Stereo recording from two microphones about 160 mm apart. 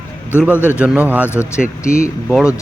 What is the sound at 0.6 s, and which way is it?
Speech, 15° left (ahead or behind).